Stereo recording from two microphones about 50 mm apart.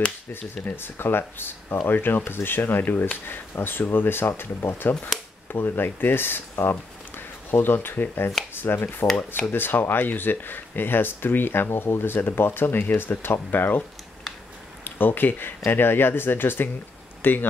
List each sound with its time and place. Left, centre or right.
0.7 s speech: left
3.3 s speech: left
14.9 s speech: left